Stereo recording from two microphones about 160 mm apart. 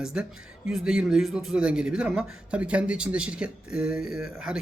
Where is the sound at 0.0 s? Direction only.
5° right (ahead or behind).